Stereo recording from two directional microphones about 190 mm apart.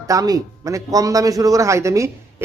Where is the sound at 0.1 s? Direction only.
20° right (ahead or behind).